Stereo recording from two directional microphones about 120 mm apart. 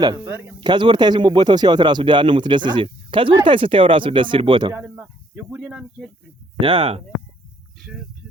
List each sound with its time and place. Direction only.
0.2 s speech: 15° right (ahead or behind)
0.6 s speech: 40° right (ahead or behind)
4.7 s speech: 15° right (ahead or behind)
6.7 s speech: 50° right (ahead or behind)